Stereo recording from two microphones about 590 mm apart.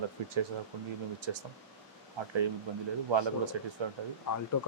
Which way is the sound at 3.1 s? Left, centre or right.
Right.